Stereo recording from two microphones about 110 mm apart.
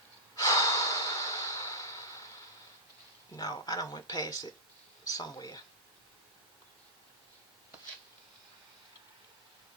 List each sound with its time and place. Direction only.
0.3 s breathing: 30° left (ahead or behind)
3.3 s speech: 35° left (ahead or behind)